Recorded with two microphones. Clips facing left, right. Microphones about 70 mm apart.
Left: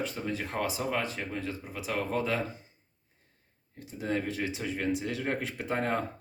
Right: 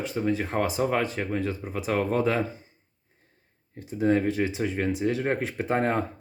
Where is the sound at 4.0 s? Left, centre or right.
Right.